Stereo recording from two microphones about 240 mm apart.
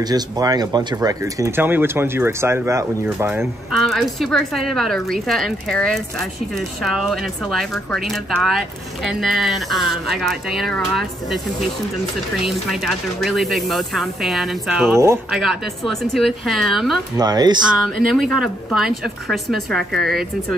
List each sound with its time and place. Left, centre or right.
0.0 s speech: centre
3.7 s speech: centre
17.2 s speech: centre
17.8 s speech: centre